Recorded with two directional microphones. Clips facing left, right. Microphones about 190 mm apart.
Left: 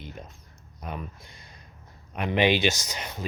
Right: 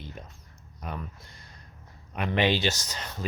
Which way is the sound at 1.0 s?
15° left (ahead or behind).